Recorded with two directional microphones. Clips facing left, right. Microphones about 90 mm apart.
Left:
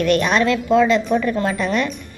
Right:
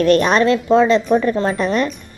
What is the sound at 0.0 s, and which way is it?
A woman's voice, 35° right (ahead or behind).